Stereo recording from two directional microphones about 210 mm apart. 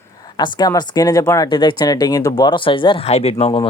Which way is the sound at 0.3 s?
20° left (ahead or behind).